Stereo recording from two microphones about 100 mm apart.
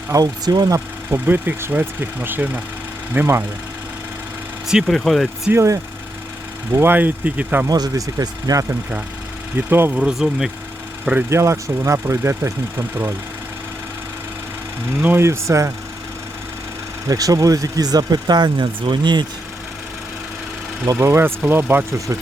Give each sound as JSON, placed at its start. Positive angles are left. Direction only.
{"t": 0.1, "sound": "speech", "side_deg": -40}
{"t": 1.1, "sound": "speech", "side_deg": -20}
{"t": 4.7, "sound": "speech", "side_deg": -5}
{"t": 5.5, "sound": "speech", "side_deg": -30}
{"t": 7.7, "sound": "speech", "side_deg": -40}
{"t": 9.6, "sound": "speech", "side_deg": -20}
{"t": 9.9, "sound": "speech", "side_deg": -5}
{"t": 11.3, "sound": "speech", "side_deg": -30}
{"t": 15.0, "sound": "speech", "side_deg": -25}
{"t": 17.1, "sound": "speech", "side_deg": -40}
{"t": 20.8, "sound": "speech", "side_deg": -30}